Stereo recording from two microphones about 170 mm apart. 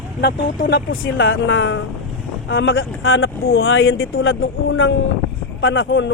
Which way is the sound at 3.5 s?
70° left (ahead or behind).